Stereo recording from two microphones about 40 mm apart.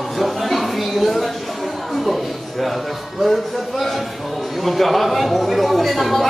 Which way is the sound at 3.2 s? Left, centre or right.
Centre.